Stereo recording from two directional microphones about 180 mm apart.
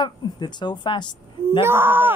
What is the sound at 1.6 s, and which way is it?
Speech, 10° right (ahead or behind).